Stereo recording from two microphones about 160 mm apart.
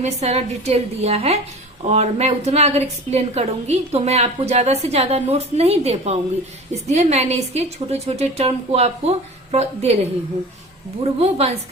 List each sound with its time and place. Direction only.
0.0 s a woman's voice: 40° right (ahead or behind)
11.0 s a woman's voice: 40° right (ahead or behind)